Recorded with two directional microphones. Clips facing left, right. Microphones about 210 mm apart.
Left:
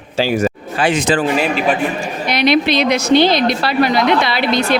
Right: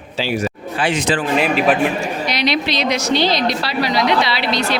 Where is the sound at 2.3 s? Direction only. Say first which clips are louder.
Left 8 dB; 55° left (ahead or behind).